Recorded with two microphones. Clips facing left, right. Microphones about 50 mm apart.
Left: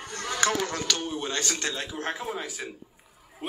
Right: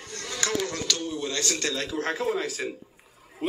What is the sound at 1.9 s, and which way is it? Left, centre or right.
Speech, right.